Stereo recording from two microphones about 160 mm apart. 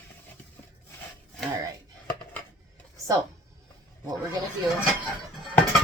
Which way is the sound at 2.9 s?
20° right (ahead or behind).